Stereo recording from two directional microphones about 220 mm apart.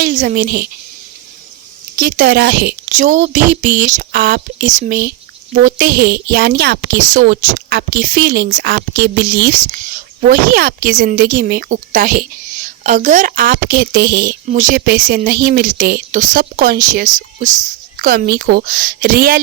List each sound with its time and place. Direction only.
0.0 s speech: 40° right (ahead or behind)
2.0 s speech: 40° right (ahead or behind)
2.9 s a woman's voice: 35° right (ahead or behind)